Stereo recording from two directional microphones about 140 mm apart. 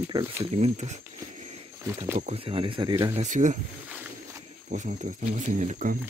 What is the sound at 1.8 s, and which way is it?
Speech, 20° right (ahead or behind).